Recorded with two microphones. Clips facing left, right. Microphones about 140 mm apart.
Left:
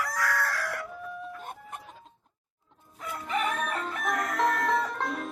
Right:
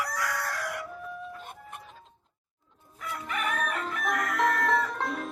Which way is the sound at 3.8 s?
Centre (ahead or behind).